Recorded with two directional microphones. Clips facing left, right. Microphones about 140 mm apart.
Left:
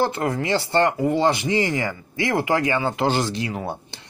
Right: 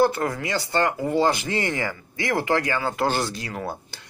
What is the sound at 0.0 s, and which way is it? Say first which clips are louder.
Speech: right 1 dB; 20° left (ahead or behind).